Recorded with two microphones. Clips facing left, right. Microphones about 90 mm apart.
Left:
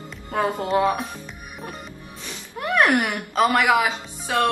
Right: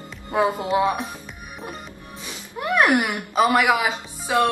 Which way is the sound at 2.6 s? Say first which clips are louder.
Even; 10° right (ahead or behind).